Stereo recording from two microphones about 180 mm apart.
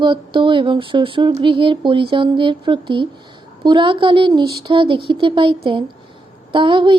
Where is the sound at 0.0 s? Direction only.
25° right (ahead or behind).